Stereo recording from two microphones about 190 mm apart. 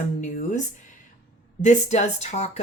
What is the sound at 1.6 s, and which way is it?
Speech, 40° left (ahead or behind).